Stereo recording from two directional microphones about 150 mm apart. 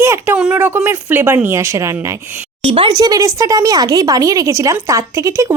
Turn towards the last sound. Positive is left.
turn(degrees=-20)  # may be behind; listen again after turning